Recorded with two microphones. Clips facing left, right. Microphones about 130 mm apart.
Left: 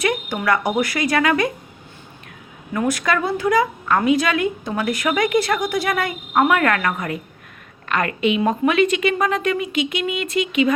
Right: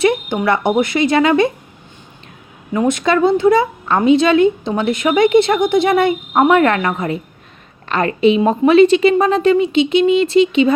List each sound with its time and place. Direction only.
0.0 s a sound: 25° right (ahead or behind)
0.8 s a woman's voice: 25° right (ahead or behind)
2.7 s a woman's voice: 25° right (ahead or behind)